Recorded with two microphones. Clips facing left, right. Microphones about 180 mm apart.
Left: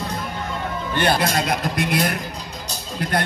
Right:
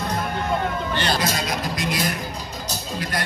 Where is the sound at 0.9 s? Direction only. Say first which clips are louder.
Left 7 dB; 55° left (ahead or behind).